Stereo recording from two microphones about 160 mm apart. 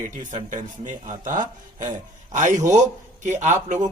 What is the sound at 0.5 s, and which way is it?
A man's voice, 55° right (ahead or behind).